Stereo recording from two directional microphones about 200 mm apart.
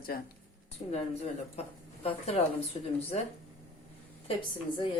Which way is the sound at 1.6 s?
30° left (ahead or behind).